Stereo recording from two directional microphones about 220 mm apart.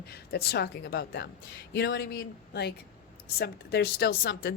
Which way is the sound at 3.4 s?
45° left (ahead or behind).